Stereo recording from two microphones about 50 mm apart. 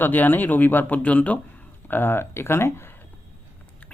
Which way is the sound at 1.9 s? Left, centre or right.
Left.